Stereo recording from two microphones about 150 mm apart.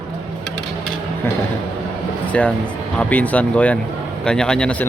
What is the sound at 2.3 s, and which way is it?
Speech, 5° left (ahead or behind).